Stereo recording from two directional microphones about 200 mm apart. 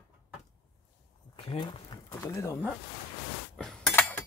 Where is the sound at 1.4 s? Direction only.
25° left (ahead or behind).